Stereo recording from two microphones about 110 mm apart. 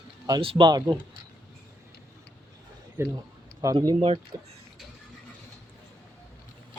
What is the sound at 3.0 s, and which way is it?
Speech, 25° right (ahead or behind).